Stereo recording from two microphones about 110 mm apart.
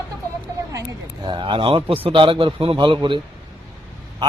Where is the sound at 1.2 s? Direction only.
45° right (ahead or behind).